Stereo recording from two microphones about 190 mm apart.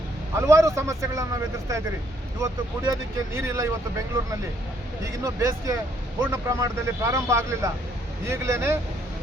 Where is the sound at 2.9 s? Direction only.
15° right (ahead or behind).